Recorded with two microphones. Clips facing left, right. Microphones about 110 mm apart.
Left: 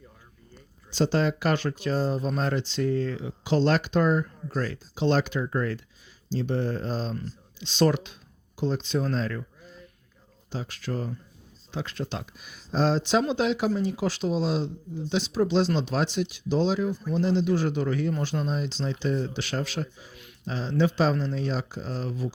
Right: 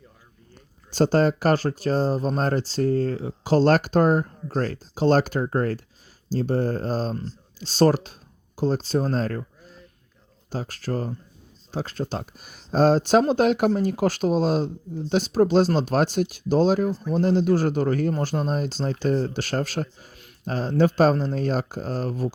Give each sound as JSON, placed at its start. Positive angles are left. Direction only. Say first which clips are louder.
{"t": 0.9, "sound": "speech", "louder": "right 5 dB", "side_deg": -45}
{"t": 10.5, "sound": "speech", "louder": "right 4 dB", "side_deg": -45}